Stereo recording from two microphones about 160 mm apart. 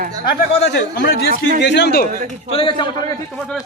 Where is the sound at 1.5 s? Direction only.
90° left.